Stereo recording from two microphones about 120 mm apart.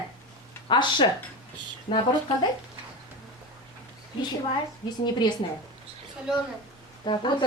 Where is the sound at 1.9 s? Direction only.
55° left (ahead or behind).